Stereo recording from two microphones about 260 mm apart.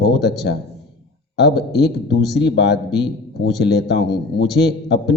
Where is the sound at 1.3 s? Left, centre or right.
Left.